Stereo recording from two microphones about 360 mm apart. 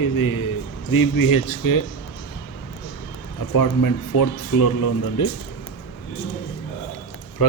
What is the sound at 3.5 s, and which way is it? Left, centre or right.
Speech, left.